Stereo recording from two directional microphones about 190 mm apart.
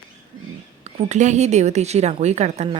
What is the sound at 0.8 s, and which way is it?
A woman's voice, 35° right (ahead or behind).